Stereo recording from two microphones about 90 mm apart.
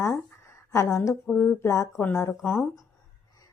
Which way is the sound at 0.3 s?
30° left (ahead or behind).